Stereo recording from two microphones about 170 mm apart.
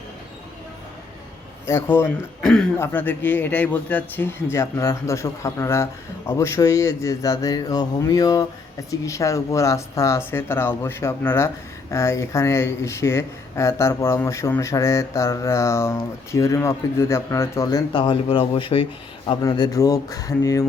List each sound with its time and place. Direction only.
1.6 s speech: 15° left (ahead or behind)
2.4 s speech: 5° left (ahead or behind); by 20.7 s 20° left (ahead or behind)